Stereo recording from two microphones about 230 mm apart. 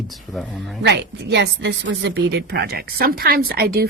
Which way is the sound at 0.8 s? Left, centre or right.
Right.